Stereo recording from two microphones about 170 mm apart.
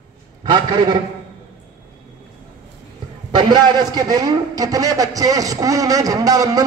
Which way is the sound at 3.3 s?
25° right (ahead or behind).